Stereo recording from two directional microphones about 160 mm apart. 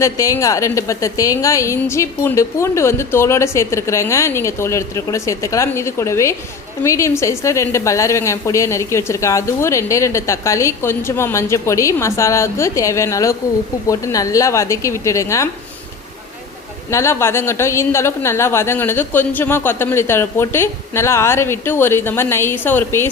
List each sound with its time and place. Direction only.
0.0 s a woman's voice: 20° left (ahead or behind)
16.9 s a woman's voice: 15° left (ahead or behind)